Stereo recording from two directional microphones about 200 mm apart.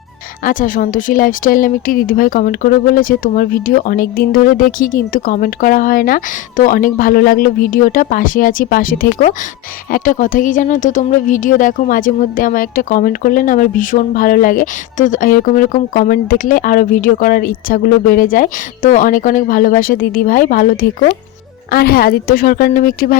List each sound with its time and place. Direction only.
0.4 s a woman's voice: 45° left (ahead or behind)